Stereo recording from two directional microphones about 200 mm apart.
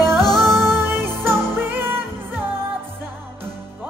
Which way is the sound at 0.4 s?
Centre (ahead or behind).